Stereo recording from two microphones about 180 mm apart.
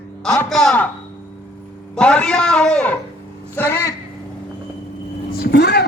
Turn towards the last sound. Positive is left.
turn(degrees=65)  # may be behind; listen again after turning